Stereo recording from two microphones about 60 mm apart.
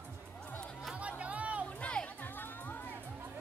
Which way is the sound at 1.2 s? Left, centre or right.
Right.